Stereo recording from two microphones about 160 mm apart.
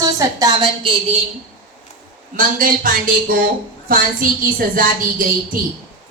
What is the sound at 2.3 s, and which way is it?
A woman's voice, 60° right (ahead or behind).